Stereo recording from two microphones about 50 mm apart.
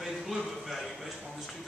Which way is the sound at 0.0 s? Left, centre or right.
Centre.